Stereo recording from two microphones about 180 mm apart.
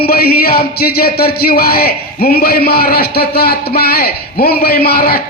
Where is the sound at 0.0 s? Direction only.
60° left (ahead or behind).